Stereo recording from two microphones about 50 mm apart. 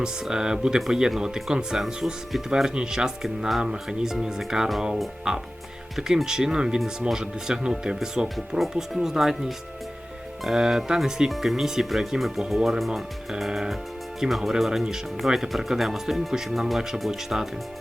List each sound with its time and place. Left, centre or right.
0.0 s speech: centre
3.2 s speech: centre
3.6 s speech: centre
6.0 s speech: centre
8.5 s speech: centre